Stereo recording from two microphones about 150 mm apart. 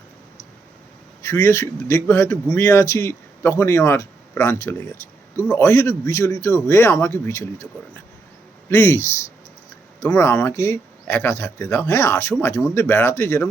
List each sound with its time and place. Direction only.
1.2 s a man's voice: 20° left (ahead or behind)
8.7 s speech: 15° left (ahead or behind)